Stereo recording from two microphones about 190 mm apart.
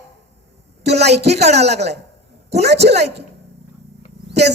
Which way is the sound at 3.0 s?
60° right (ahead or behind).